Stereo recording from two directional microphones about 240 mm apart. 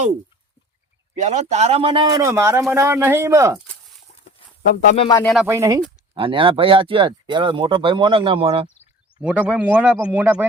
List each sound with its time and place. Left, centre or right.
1.1 s a man's voice: right; by 3.6 s centre
4.9 s speech: centre
5.2 s a man's voice: centre
5.5 s a man's voice: centre
9.2 s a man's voice: centre